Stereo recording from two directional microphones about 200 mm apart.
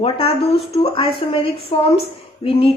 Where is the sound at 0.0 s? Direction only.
30° left (ahead or behind).